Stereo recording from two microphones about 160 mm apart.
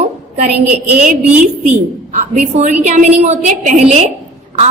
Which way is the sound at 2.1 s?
50° right (ahead or behind).